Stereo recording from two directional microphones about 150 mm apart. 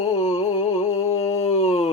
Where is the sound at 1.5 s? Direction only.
45° left (ahead or behind).